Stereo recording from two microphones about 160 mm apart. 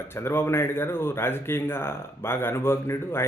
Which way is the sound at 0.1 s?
15° left (ahead or behind).